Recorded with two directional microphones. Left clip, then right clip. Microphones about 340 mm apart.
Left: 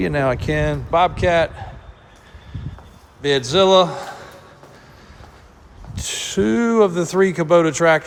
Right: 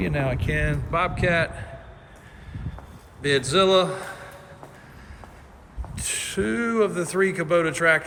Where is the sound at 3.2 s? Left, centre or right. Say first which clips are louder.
Left 4 dB; centre.